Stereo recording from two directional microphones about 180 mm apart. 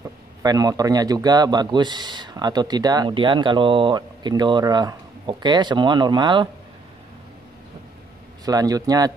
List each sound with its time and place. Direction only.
0.4 s a man's voice: 20° right (ahead or behind)
8.5 s a man's voice: 20° right (ahead or behind)